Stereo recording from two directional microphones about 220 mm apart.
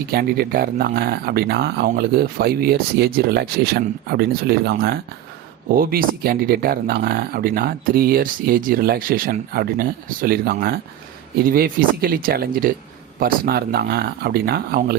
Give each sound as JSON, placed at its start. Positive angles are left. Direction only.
{"t": 0.1, "sound": "speech", "side_deg": -45}